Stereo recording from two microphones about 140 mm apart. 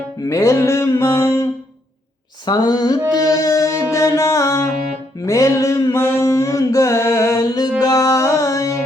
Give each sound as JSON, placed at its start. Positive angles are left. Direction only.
{"t": 0.2, "sound": "music", "side_deg": 25}
{"t": 2.5, "sound": "music", "side_deg": 30}
{"t": 5.2, "sound": "mantra", "side_deg": 20}
{"t": 7.8, "sound": "music", "side_deg": 25}